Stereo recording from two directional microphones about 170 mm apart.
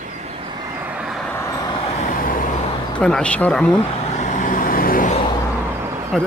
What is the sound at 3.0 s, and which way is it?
Speech, 5° left (ahead or behind).